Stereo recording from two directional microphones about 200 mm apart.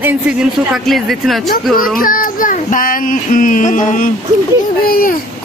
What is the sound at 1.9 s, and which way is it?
Child singing, 45° left (ahead or behind).